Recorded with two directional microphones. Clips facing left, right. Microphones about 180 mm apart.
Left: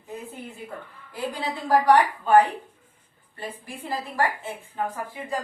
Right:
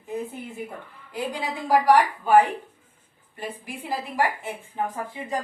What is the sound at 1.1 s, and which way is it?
A woman's voice, 15° right (ahead or behind).